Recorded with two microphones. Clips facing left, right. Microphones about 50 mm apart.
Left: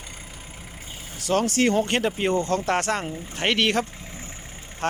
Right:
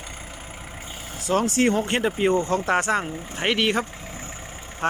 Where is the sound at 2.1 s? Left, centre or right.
Centre.